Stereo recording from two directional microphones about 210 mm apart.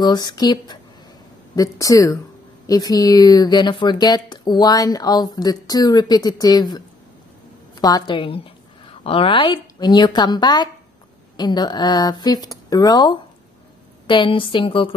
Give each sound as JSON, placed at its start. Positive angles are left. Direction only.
{"t": 0.0, "sound": "a woman's voice", "side_deg": 20}